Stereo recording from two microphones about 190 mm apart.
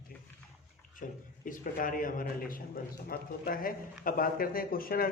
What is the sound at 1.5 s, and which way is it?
Speech, 45° left (ahead or behind).